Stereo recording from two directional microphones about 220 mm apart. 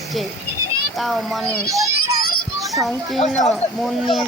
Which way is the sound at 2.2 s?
45° left (ahead or behind).